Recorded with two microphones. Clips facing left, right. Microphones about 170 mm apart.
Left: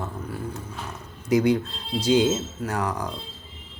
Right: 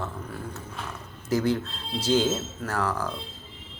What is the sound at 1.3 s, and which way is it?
Speech, 15° left (ahead or behind).